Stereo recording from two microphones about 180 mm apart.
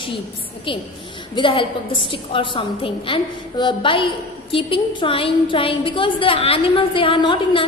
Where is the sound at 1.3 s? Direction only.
30° left (ahead or behind).